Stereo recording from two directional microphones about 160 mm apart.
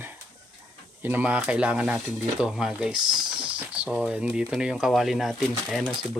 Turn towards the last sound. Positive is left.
turn(degrees=0)  # may be behind; listen again after turning